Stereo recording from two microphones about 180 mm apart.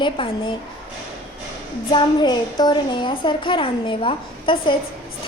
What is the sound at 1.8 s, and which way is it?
Speech, 25° left (ahead or behind).